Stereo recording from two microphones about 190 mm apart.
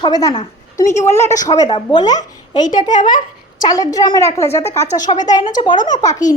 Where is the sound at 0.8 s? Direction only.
40° left (ahead or behind).